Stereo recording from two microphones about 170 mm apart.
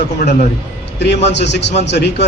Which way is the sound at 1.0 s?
90° left.